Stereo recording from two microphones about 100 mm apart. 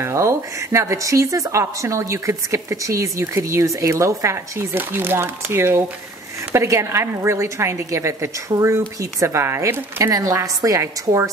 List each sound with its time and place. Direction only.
0.0 s speech: 30° right (ahead or behind)
10.1 s a woman's voice: 35° right (ahead or behind)